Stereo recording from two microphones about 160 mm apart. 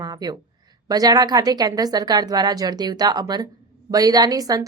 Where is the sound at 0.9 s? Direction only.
25° right (ahead or behind).